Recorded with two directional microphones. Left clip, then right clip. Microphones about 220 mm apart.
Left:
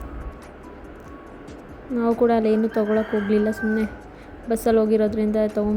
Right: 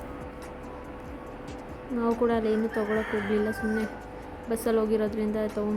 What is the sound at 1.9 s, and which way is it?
A woman's voice, 15° left (ahead or behind).